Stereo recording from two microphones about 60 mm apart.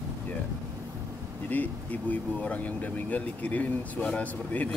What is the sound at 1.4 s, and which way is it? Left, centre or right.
Speech, left.